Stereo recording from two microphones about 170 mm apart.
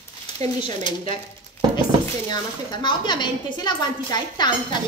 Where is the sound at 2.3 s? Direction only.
25° left (ahead or behind).